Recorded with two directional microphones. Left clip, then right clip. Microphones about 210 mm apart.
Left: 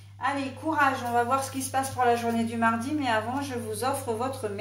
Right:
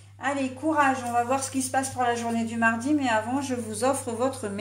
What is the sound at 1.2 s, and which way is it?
A woman's voice, 45° right (ahead or behind).